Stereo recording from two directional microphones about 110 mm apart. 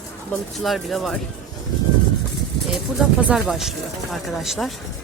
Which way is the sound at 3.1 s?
10° right (ahead or behind).